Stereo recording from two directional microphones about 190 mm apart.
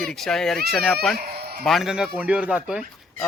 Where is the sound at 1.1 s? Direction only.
55° right (ahead or behind).